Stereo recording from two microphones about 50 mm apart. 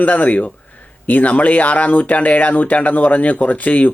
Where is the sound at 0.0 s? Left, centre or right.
Left.